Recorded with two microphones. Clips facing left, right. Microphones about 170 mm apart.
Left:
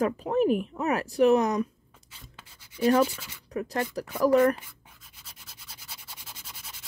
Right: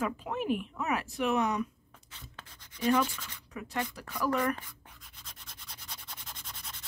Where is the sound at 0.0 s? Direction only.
40° left (ahead or behind).